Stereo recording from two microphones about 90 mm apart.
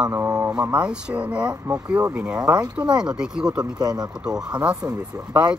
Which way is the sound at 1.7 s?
30° right (ahead or behind).